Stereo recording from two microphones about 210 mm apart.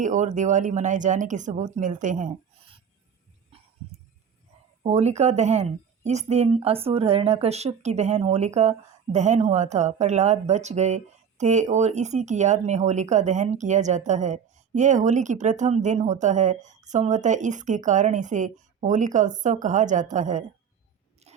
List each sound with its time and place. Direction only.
0.0 s a woman's voice: 35° right (ahead or behind)
4.8 s a woman's voice: 30° right (ahead or behind)